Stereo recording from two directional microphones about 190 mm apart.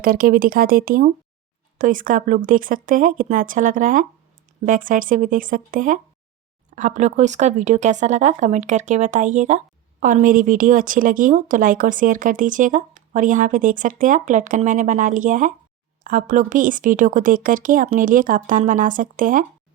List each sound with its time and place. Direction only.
0.0 s speech: 50° right (ahead or behind)